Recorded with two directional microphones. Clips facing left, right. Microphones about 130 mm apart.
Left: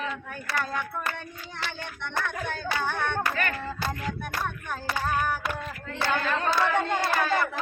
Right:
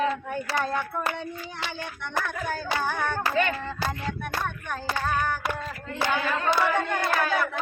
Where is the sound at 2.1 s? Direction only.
5° right (ahead or behind).